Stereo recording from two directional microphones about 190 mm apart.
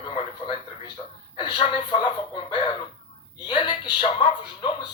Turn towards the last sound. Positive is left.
turn(degrees=25)  # may be behind; listen again after turning